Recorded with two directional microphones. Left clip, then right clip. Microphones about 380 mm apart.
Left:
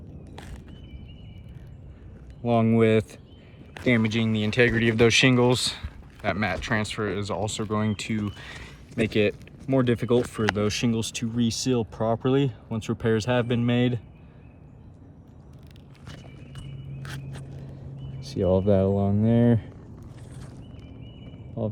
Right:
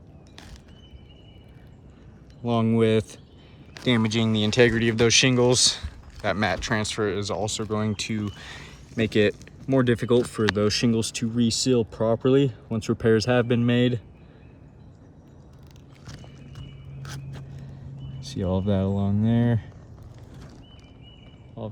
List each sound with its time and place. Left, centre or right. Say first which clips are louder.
2.4 s speech: left 1 dB; centre
18.2 s speech: left 5 dB; centre